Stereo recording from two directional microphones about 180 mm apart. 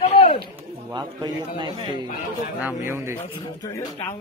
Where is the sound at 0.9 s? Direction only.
20° right (ahead or behind).